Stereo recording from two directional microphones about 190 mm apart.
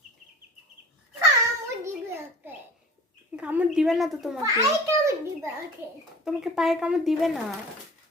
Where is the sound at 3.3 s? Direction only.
10° right (ahead or behind).